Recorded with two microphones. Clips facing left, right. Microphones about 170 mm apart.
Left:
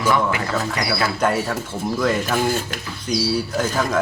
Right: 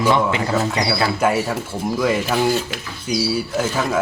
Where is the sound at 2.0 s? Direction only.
5° right (ahead or behind).